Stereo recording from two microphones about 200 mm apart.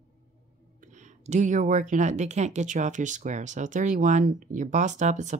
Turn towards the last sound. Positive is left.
turn(degrees=-35)  # may be behind; listen again after turning